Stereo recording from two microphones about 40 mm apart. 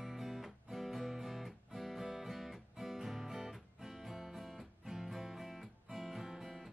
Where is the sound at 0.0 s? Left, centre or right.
Centre.